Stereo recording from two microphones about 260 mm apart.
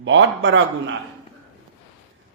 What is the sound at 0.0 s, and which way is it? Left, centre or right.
Speech, right.